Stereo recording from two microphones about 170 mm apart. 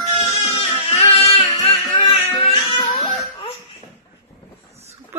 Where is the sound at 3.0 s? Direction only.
30° left (ahead or behind).